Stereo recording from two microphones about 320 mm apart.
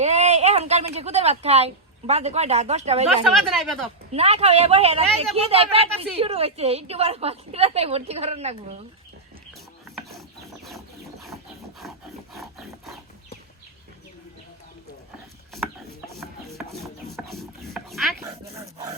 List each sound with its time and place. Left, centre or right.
0.0 s speech: right
3.3 s speech: centre
4.1 s speech: centre
9.9 s pulleys: centre
11.8 s rub: centre
16.6 s rub: centre